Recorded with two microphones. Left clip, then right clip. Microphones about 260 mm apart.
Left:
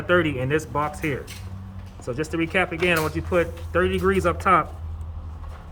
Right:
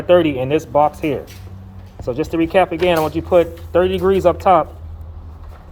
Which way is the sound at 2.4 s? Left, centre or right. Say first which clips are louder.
Right 7 dB; centre.